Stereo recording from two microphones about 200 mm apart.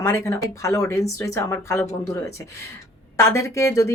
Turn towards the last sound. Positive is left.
turn(degrees=15)  # may be behind; listen again after turning